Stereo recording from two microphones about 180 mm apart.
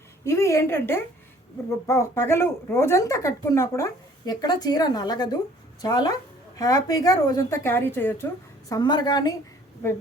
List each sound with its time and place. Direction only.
0.3 s a woman's voice: 15° left (ahead or behind)
8.7 s a woman's voice: 25° left (ahead or behind)